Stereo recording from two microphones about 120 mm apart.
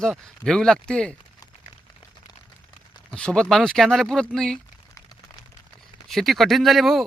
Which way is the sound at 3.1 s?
5° left (ahead or behind).